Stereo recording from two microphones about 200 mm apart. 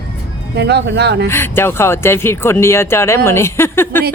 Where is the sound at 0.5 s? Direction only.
55° right (ahead or behind).